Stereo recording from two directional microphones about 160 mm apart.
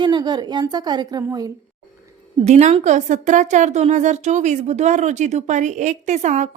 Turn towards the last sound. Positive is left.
turn(degrees=-50)  # may be behind; listen again after turning